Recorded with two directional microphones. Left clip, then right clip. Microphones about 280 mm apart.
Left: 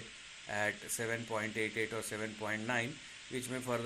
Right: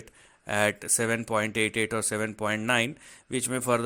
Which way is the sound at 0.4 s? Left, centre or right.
Right.